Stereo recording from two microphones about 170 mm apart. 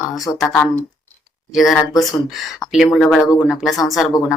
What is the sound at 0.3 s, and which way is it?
Speech, 15° left (ahead or behind).